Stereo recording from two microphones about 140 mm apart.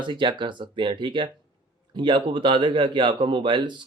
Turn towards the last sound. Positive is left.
turn(degrees=-35)  # may be behind; listen again after turning